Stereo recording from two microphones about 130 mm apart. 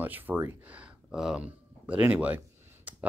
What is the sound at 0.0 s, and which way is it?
Speech, 15° right (ahead or behind).